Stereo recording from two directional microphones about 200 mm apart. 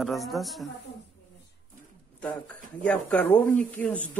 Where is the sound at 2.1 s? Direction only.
5° left (ahead or behind).